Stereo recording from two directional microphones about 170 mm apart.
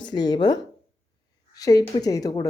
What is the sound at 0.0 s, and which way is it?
Speech, 25° left (ahead or behind).